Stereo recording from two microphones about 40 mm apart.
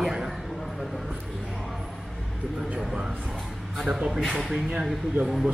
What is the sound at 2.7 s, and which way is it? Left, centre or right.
Speech, centre.